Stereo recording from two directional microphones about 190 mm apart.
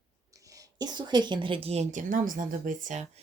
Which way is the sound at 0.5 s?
20° right (ahead or behind).